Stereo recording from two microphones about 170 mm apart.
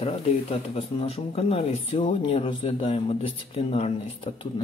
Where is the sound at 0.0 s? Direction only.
35° left (ahead or behind).